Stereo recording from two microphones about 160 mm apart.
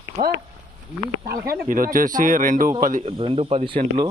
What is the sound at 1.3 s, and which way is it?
Speech, 60° right (ahead or behind).